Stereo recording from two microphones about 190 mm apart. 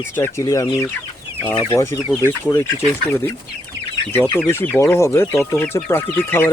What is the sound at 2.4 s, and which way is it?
Speech, 15° left (ahead or behind).